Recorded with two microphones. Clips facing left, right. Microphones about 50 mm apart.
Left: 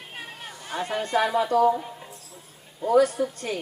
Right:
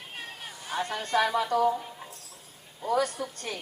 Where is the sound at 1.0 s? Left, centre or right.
Left.